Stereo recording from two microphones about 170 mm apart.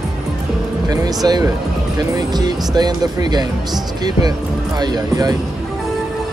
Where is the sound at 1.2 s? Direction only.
25° right (ahead or behind).